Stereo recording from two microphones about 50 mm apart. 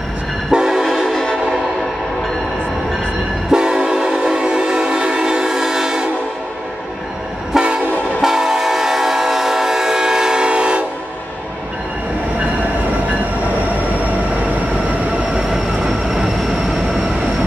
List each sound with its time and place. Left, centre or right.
0.5 s train: centre
1.0 s train: centre
3.5 s train: centre
7.5 s train: centre
15.3 s train: centre